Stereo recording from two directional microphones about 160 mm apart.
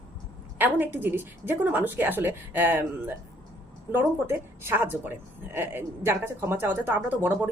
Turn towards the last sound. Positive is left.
turn(degrees=-10)  # may be behind; listen again after turning